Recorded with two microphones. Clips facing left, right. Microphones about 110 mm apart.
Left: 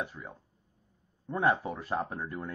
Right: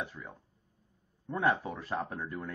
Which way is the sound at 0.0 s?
15° left (ahead or behind).